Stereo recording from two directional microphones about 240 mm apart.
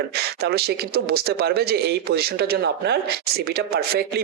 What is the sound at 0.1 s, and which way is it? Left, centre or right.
Speech, right.